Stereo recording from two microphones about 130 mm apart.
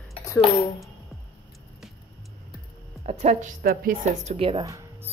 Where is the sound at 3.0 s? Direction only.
65° right (ahead or behind).